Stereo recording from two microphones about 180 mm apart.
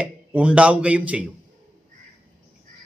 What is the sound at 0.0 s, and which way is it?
A man's voice, 5° right (ahead or behind).